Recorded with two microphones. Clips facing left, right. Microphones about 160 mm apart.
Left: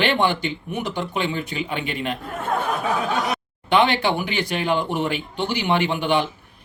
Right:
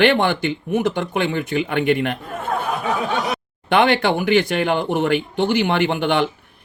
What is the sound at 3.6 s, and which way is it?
A man's voice, 55° right (ahead or behind).